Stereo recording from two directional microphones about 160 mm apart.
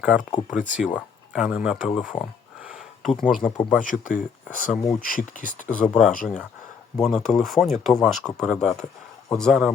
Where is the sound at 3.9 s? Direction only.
55° left (ahead or behind).